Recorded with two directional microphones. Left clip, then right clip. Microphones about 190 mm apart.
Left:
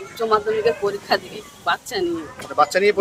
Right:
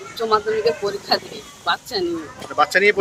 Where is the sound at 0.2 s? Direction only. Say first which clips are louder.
Even; 10° left (ahead or behind).